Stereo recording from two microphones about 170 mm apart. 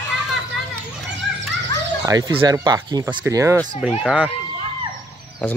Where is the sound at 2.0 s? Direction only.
20° right (ahead or behind).